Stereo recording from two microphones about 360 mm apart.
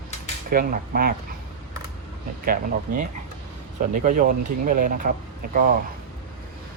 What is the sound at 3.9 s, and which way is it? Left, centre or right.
Speech, right.